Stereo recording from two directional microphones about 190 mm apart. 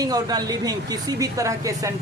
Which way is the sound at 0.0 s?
20° right (ahead or behind).